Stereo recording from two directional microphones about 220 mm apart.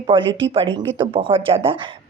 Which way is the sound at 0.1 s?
20° right (ahead or behind).